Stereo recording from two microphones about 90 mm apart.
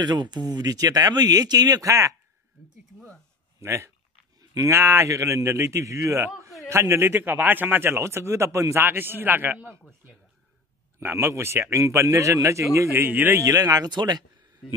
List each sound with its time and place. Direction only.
0.0 s speech: 55° right (ahead or behind); by 2.1 s 35° right (ahead or behind)
3.5 s a man's voice: 30° right (ahead or behind)
11.0 s a man's voice: 30° right (ahead or behind)
13.4 s speech: 40° right (ahead or behind)